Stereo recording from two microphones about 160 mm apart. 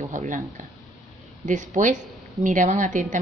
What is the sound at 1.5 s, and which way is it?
A woman's voice, 55° right (ahead or behind).